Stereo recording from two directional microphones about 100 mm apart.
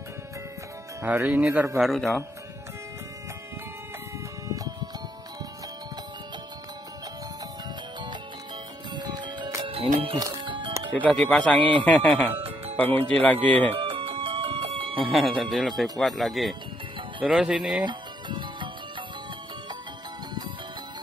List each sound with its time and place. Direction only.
1.3 s speech: 15° right (ahead or behind)
1.8 s speech: centre (ahead or behind)
8.9 s music: 45° right (ahead or behind)
9.6 s music: 65° right (ahead or behind)
10.1 s speech: 35° right (ahead or behind)
10.4 s music: 55° right (ahead or behind)
11.0 s speech: 10° left (ahead or behind)
13.7 s music: 60° right (ahead or behind)
15.0 s speech: centre (ahead or behind)
17.8 s music: 50° right (ahead or behind)